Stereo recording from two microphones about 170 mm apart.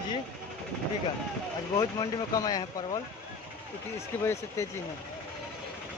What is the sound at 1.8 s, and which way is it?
Speech, 20° left (ahead or behind).